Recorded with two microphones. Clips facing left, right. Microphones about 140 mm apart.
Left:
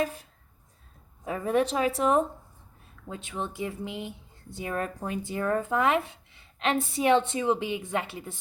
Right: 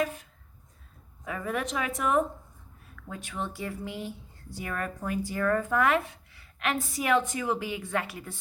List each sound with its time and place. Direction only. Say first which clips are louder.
0.0 s speech: left 1 dB; 30° left (ahead or behind)